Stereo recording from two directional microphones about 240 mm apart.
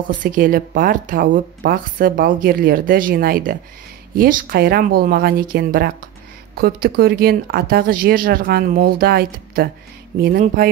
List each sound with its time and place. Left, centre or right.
0.2 s speech: right